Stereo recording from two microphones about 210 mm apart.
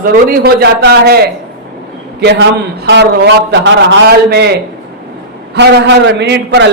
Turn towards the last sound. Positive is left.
turn(degrees=-55)  # may be behind; listen again after turning